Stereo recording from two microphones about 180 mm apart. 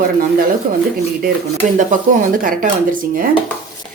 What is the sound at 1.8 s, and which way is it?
Speech, 50° right (ahead or behind).